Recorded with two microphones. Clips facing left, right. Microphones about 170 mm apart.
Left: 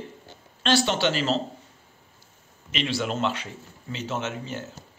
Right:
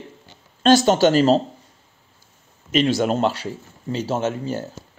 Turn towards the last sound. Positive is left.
turn(degrees=-40)  # may be behind; listen again after turning